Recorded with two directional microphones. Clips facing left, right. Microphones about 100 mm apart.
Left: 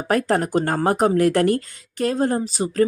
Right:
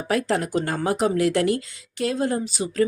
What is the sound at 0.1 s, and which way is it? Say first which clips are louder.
A woman's voice: left 3 dB; 45° left (ahead or behind).